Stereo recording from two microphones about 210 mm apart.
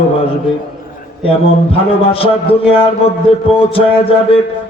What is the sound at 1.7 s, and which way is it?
A man's voice, 25° left (ahead or behind).